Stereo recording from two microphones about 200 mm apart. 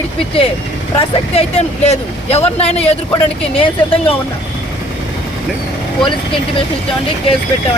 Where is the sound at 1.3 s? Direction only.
30° left (ahead or behind).